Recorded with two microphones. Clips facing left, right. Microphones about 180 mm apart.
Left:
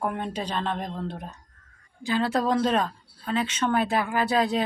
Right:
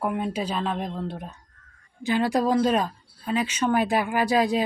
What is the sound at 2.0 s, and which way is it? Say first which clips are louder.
Speech: right 2 dB; 15° right (ahead or behind).